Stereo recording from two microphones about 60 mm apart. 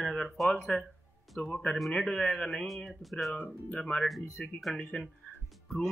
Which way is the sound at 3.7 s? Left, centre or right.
Centre.